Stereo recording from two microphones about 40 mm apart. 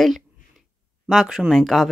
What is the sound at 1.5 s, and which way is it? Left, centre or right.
Speech, centre.